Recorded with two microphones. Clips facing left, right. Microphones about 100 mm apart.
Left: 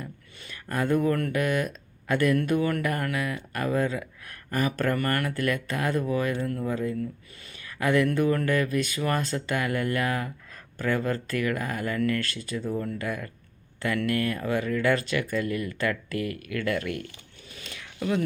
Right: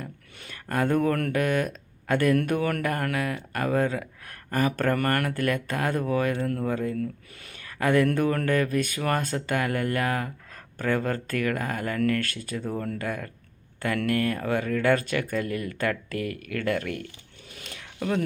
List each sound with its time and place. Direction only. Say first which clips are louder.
0.0 s speech: right 1 dB; 50° right (ahead or behind)
4.4 s speech: right 2 dB; 40° right (ahead or behind)
17.5 s zipper: even; 50° right (ahead or behind)